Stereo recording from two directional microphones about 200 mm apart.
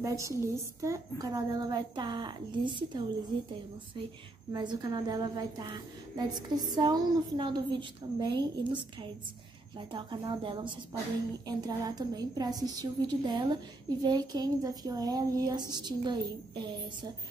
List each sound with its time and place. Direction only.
0.0 s a woman's voice: 15° right (ahead or behind)
4.5 s a woman's voice: 20° right (ahead or behind)